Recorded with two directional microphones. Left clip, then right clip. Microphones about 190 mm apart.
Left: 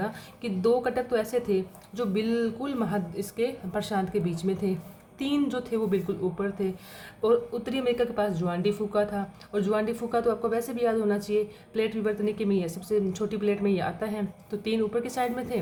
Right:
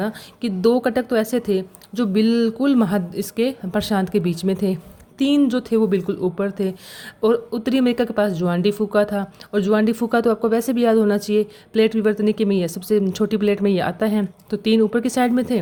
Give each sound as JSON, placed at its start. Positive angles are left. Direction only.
{"t": 0.0, "sound": "speech", "side_deg": -45}